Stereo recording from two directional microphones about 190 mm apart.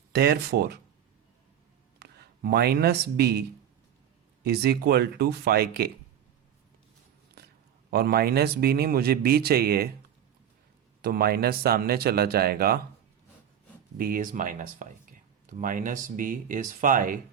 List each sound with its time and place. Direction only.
0.1 s speech: 55° right (ahead or behind)
2.0 s speech: 55° right (ahead or behind)
4.4 s speech: 55° right (ahead or behind)
7.4 s a sound: 55° right (ahead or behind)
7.9 s a man's voice: 55° right (ahead or behind)
11.0 s a man's voice: 55° right (ahead or behind)
14.0 s a man's voice: 45° right (ahead or behind)